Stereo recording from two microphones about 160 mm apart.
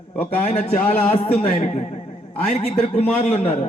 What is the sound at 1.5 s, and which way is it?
A man's voice, 45° left (ahead or behind).